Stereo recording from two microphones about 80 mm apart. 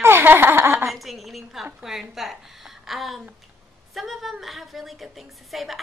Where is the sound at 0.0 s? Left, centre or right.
Right.